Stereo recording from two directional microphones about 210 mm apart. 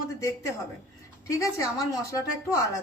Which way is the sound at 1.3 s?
15° left (ahead or behind).